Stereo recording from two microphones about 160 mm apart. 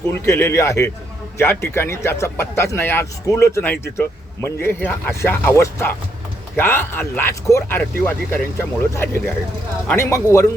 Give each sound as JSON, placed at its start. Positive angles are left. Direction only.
{"t": 0.3, "sound": "speech", "side_deg": 20}